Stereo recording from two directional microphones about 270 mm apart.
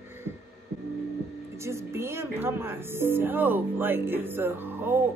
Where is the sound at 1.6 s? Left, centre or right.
Centre.